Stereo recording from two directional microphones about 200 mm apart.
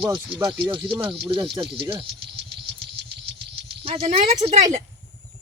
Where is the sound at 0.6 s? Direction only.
25° right (ahead or behind).